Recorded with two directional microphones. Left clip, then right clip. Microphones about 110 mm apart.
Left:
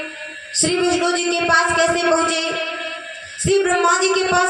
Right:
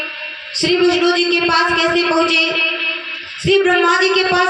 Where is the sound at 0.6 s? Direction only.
45° right (ahead or behind).